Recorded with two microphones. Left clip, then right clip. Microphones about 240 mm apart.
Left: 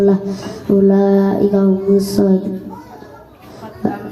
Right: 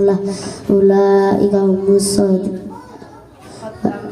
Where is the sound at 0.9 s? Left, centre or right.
Right.